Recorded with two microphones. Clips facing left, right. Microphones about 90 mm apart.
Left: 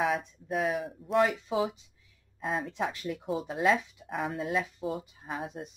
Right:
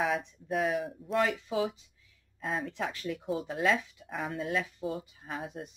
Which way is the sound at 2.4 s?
Centre (ahead or behind).